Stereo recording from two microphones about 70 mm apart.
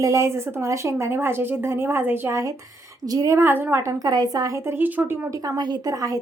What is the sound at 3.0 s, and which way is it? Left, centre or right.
Speech, right.